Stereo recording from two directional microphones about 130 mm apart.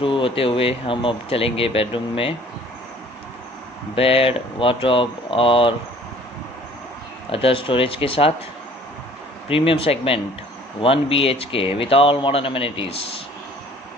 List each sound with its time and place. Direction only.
0.0 s speech: 40° left (ahead or behind)
3.9 s speech: 45° left (ahead or behind)
7.2 s speech: 45° left (ahead or behind)
9.5 s speech: 45° left (ahead or behind)